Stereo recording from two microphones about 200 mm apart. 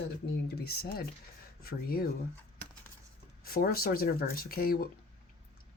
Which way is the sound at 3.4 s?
50° left (ahead or behind).